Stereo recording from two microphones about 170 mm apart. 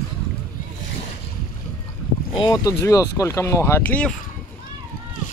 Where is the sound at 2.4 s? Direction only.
20° left (ahead or behind).